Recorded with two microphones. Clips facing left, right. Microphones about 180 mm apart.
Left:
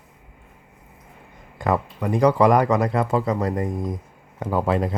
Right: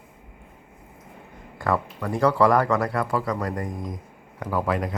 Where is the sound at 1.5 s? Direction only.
20° left (ahead or behind).